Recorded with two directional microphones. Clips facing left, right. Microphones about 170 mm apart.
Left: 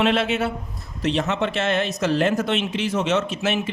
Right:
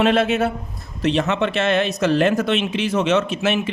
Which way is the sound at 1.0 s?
65° right (ahead or behind).